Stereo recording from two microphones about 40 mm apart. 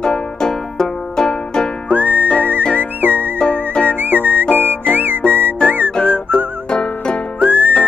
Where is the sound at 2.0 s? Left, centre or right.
Left.